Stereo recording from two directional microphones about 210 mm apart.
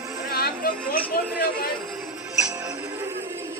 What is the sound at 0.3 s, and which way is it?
Chatter, 45° left (ahead or behind).